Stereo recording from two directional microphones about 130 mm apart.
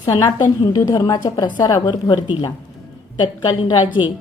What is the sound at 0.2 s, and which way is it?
A woman's voice, 30° left (ahead or behind).